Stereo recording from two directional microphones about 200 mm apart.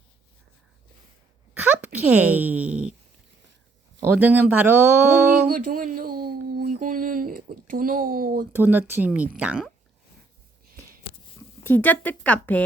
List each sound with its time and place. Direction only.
1.5 s a child's voice: 10° right (ahead or behind)
4.0 s speech: 10° right (ahead or behind)
5.5 s a sound: 45° right (ahead or behind)
8.5 s speech: 10° right (ahead or behind)
11.6 s speech: 10° left (ahead or behind)